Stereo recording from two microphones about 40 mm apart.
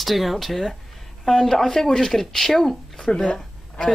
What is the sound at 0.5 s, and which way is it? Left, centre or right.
Speech, centre.